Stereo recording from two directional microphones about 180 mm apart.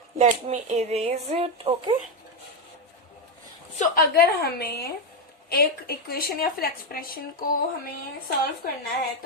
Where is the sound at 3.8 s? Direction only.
55° left (ahead or behind).